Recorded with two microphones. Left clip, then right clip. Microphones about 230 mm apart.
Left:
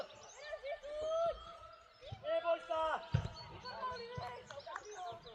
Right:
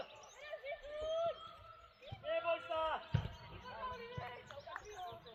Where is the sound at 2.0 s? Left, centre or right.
Left.